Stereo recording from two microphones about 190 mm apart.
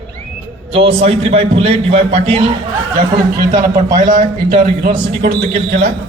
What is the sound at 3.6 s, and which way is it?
A man's voice, 50° right (ahead or behind).